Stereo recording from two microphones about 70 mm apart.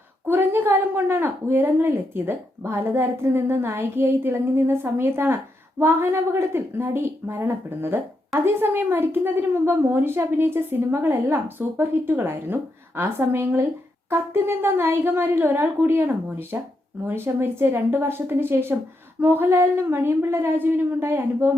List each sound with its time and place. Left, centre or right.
0.3 s a woman's voice: right